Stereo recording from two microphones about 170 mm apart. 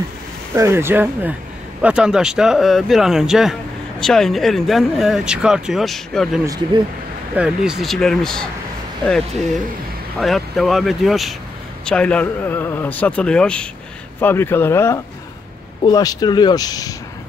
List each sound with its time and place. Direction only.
0.6 s speech: 15° right (ahead or behind)
6.4 s speech: 20° right (ahead or behind)
7.3 s speech: 5° right (ahead or behind)
10.1 s speech: centre (ahead or behind); by 16.9 s 20° left (ahead or behind)